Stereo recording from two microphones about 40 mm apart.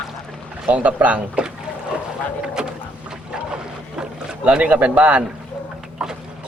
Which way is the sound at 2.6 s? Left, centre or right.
Right.